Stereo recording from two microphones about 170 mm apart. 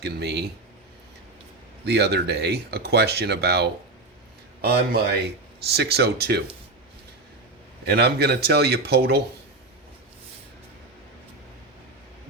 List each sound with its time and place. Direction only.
0.0 s speech: 75° right (ahead or behind)
1.8 s speech: 75° right (ahead or behind)
4.6 s a man's voice: 65° right (ahead or behind)
5.6 s speech: 75° right (ahead or behind)
7.9 s speech: 70° right (ahead or behind)